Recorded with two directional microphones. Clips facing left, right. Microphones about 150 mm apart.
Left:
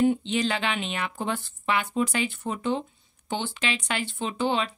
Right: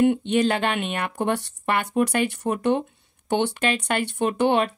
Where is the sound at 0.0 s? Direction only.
60° right (ahead or behind).